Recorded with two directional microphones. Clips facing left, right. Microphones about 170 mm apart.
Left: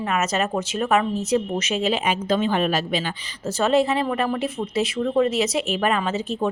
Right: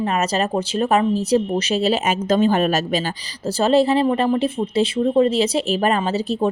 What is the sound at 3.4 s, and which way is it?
A woman's voice, 35° right (ahead or behind).